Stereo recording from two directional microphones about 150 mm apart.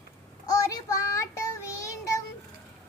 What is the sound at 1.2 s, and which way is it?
Child singing, 20° left (ahead or behind).